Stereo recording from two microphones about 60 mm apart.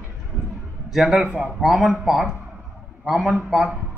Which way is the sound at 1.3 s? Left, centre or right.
Right.